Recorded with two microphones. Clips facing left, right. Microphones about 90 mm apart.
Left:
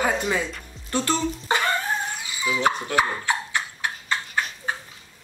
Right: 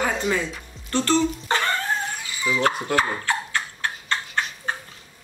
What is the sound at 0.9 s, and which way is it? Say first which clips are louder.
Bathtub: right 3 dB; 15° left (ahead or behind).